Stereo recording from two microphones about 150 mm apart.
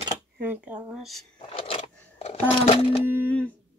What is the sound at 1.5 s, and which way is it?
Scissors, 40° left (ahead or behind).